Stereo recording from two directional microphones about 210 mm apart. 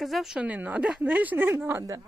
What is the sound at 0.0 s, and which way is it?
A woman's voice, centre (ahead or behind).